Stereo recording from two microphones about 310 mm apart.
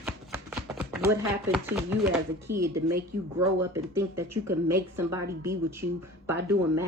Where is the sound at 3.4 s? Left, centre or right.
Centre.